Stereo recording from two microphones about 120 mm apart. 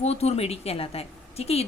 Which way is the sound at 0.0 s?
60° left (ahead or behind).